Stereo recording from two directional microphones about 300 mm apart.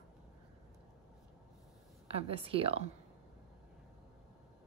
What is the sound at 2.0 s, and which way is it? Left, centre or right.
Speech, centre.